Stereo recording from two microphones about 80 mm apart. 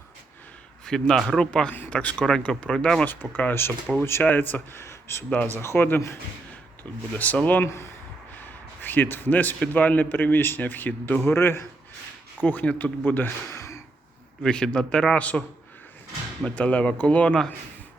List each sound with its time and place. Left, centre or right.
0.9 s a man's voice: centre
3.1 s a man's voice: left
4.8 s a sound: left
5.6 s a man's voice: left
7.1 s a man's voice: centre
7.6 s speech: left
8.4 s a man's voice: left
13.5 s a sound: left
14.4 s a man's voice: centre
16.6 s a man's voice: centre